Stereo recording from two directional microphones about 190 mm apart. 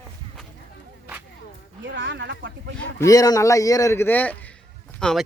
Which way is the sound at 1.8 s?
70° right (ahead or behind).